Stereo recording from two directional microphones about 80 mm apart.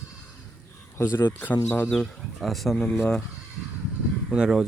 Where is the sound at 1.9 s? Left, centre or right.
Centre.